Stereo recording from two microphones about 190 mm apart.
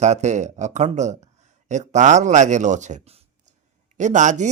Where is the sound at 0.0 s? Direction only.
35° right (ahead or behind).